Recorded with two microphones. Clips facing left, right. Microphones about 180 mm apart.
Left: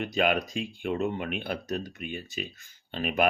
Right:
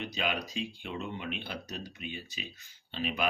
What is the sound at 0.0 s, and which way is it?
Speech, 50° left (ahead or behind).